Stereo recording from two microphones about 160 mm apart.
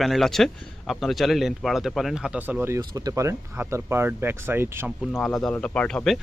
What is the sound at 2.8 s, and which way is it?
Speech, 25° right (ahead or behind).